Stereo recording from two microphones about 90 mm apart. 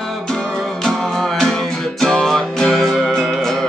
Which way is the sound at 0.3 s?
10° left (ahead or behind).